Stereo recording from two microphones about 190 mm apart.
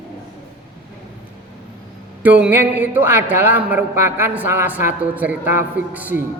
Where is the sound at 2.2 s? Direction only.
10° right (ahead or behind).